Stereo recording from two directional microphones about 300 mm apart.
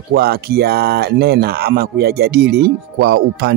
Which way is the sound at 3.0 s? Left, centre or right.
Right.